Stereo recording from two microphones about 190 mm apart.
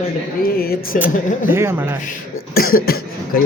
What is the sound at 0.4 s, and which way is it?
A man's voice, 55° left (ahead or behind).